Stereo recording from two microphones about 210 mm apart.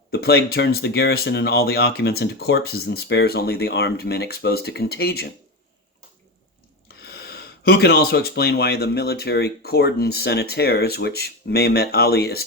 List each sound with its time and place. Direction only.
0.1 s speech: 50° left (ahead or behind)
6.8 s speech: 50° left (ahead or behind)